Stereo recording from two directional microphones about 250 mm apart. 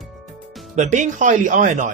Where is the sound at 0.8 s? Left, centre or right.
Right.